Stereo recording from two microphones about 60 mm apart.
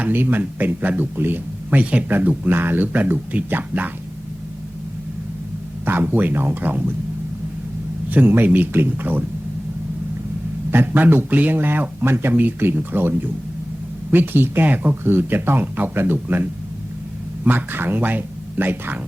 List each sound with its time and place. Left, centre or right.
0.0 s speech: right
1.8 s speech: right
5.8 s speech: right
8.1 s speech: right
10.7 s speech: right